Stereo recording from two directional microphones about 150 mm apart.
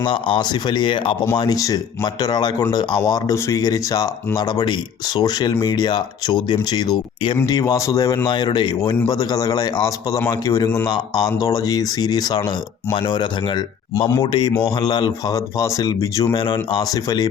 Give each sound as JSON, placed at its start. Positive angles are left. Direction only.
{"t": 0.0, "sound": "speech", "side_deg": 35}